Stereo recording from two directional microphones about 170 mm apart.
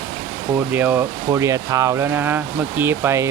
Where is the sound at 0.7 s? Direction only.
10° right (ahead or behind).